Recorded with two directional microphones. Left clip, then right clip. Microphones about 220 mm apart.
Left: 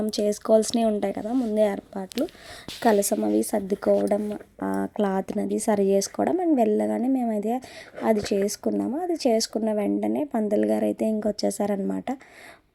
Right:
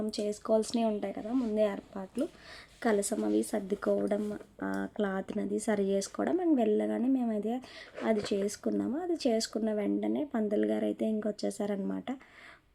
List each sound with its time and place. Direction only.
0.0 s speech: 35° left (ahead or behind)